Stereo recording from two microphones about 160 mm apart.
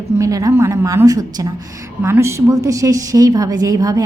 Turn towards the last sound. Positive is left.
turn(degrees=-20)  # may be behind; listen again after turning